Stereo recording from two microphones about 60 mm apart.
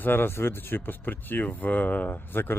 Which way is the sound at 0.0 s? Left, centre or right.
Left.